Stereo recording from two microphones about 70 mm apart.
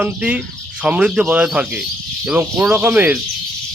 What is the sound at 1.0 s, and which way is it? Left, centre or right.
Cricket, centre.